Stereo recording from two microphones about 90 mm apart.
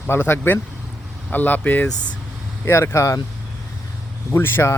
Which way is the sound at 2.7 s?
30° left (ahead or behind).